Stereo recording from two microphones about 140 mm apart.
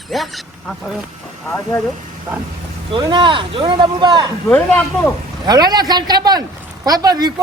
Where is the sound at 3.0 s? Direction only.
35° right (ahead or behind).